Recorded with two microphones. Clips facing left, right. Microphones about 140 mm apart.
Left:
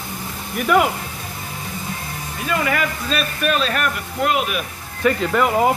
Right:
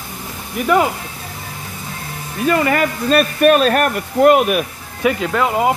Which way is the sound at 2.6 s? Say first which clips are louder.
Right 5 dB; 45° right (ahead or behind).